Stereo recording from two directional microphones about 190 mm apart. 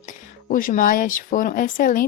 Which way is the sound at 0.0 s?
45° left (ahead or behind).